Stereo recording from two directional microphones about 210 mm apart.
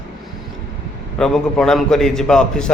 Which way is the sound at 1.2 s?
Centre (ahead or behind).